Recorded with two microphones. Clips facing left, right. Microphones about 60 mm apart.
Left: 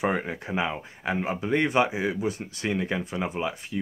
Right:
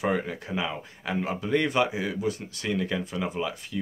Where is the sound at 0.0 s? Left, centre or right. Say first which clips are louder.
Even; left.